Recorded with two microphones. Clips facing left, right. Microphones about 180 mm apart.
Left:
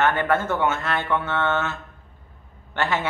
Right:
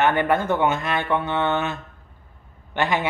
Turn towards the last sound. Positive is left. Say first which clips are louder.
# right 2 dB
turn(degrees=-15)  # may be behind; listen again after turning